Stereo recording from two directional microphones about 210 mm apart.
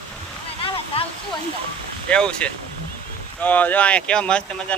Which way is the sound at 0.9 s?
25° left (ahead or behind).